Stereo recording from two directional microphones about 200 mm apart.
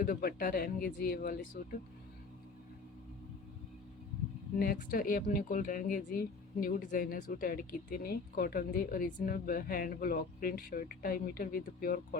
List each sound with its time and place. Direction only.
0.0 s speech: 45° left (ahead or behind)
4.6 s speech: 45° left (ahead or behind)